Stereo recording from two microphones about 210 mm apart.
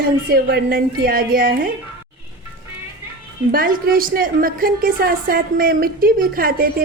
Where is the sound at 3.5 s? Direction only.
45° right (ahead or behind).